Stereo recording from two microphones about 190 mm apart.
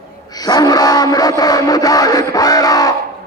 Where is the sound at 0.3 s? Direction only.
20° left (ahead or behind).